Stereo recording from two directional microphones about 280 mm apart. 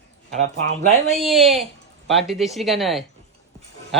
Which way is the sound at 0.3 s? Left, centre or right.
Right.